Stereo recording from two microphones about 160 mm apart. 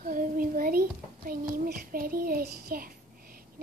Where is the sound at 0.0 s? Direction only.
60° right (ahead or behind).